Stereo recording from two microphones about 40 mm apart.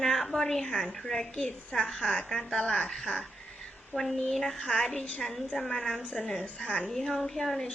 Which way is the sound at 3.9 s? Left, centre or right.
Centre.